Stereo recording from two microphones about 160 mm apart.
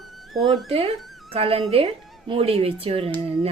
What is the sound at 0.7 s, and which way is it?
Speech, 35° right (ahead or behind).